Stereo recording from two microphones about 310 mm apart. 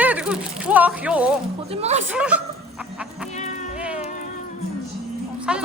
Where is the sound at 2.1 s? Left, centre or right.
Centre.